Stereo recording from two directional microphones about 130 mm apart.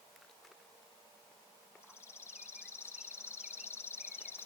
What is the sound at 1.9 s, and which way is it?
Insect, 20° left (ahead or behind).